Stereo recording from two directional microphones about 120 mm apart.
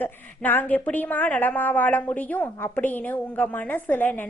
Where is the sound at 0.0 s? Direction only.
15° left (ahead or behind).